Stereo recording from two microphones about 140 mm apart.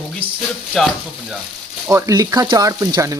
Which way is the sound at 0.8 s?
Centre (ahead or behind).